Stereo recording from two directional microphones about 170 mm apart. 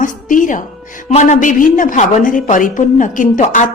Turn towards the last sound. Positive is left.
turn(degrees=45)  # may be behind; listen again after turning